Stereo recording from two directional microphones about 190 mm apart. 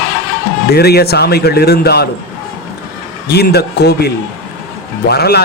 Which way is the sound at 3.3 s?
60° left (ahead or behind).